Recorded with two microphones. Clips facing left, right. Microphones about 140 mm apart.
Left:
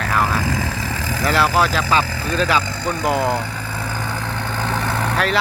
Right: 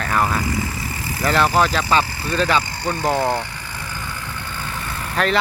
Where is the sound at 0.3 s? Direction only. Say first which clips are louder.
Left 1 dB; 90° left.